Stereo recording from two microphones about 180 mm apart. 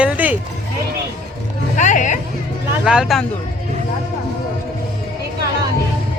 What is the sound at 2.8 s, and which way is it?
Speech, 5° right (ahead or behind).